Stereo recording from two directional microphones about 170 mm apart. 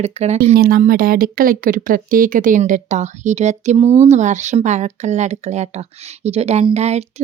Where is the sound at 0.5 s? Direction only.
60° right (ahead or behind).